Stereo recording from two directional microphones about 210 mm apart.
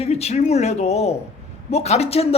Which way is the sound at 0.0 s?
30° left (ahead or behind).